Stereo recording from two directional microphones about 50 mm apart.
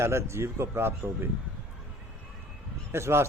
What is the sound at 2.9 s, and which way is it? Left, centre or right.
Speech, right.